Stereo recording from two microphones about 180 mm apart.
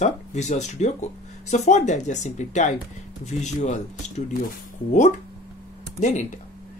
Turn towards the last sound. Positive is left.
turn(degrees=40)  # may be behind; listen again after turning